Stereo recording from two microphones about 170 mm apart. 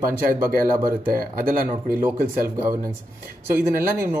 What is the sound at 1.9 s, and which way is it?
Speech, 15° right (ahead or behind).